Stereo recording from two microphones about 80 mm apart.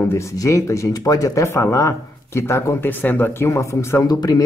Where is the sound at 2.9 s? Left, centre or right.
Left.